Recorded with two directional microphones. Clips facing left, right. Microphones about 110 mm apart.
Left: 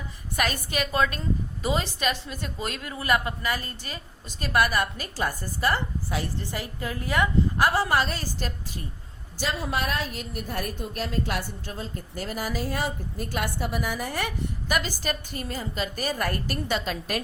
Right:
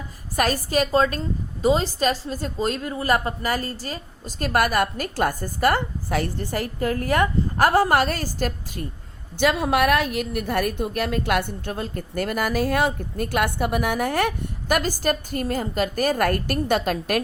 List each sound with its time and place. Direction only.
0.3 s a woman's voice: 40° right (ahead or behind)
9.4 s a woman's voice: 70° right (ahead or behind); by 17.2 s 50° right (ahead or behind)